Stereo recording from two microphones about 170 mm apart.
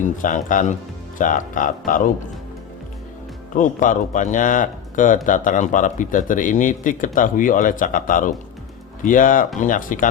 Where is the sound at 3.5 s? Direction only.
50° left (ahead or behind).